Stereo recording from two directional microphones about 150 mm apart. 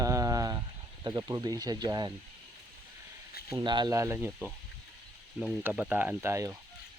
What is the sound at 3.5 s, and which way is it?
Speech, 25° right (ahead or behind).